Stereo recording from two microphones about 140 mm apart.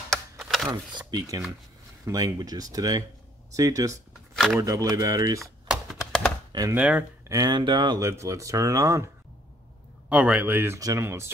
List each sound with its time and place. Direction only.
0.1 s a sound: centre (ahead or behind)
0.7 s speech: 30° right (ahead or behind)
5.4 s typewriter: centre (ahead or behind)
6.7 s speech: 10° right (ahead or behind)
7.2 s speech: 25° right (ahead or behind)
8.0 s speech: 20° right (ahead or behind)
10.0 s speech: 10° right (ahead or behind)